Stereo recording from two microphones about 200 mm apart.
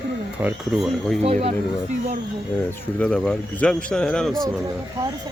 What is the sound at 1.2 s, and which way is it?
Speech, 30° right (ahead or behind).